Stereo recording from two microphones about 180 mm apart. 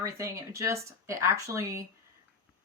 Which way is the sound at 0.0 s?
20° right (ahead or behind).